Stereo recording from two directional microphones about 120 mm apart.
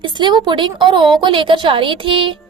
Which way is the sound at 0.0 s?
40° right (ahead or behind).